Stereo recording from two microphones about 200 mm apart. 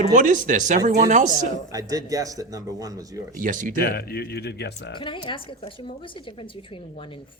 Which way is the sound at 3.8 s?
50° left (ahead or behind).